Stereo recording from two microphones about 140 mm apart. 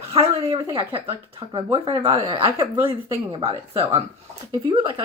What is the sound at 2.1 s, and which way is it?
Speech, 25° right (ahead or behind).